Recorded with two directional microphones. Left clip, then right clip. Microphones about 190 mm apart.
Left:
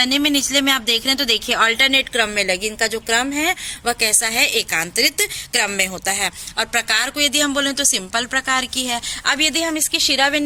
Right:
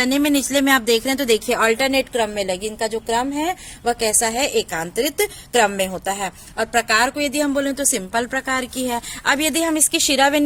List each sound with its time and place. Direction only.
0.0 s a woman's voice: 45° right (ahead or behind)